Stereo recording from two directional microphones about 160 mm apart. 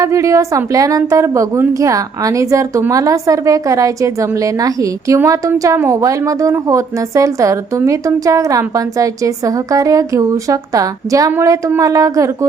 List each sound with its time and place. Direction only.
0.0 s a woman's voice: 20° right (ahead or behind)